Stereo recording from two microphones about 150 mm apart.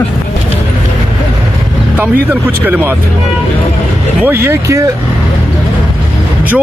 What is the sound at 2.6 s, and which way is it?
Speech, 10° right (ahead or behind).